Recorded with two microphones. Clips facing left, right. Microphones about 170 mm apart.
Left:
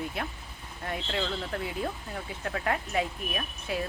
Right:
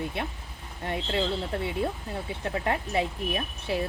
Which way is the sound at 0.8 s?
20° right (ahead or behind).